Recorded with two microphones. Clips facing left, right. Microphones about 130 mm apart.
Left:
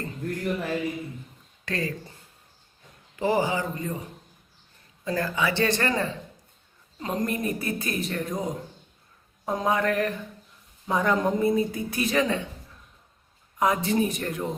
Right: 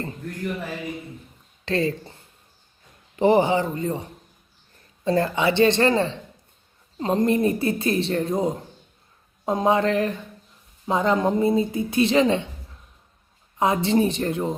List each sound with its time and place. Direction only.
1.6 s speech: 25° right (ahead or behind)
3.2 s speech: 25° right (ahead or behind)
13.6 s speech: 25° right (ahead or behind)